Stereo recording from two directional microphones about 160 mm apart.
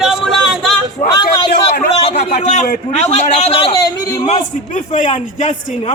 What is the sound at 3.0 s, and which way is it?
Speech, 45° left (ahead or behind).